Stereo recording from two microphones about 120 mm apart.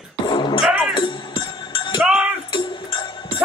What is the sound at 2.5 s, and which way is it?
Music, 45° left (ahead or behind).